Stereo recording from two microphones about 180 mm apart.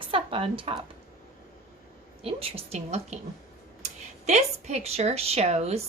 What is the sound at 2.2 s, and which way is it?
Speech, 30° right (ahead or behind).